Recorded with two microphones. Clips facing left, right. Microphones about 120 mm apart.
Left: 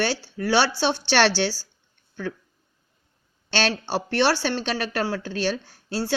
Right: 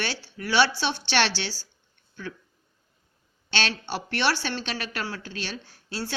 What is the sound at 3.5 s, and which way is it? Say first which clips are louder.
A woman's voice: left 5 dB; 40° left (ahead or behind).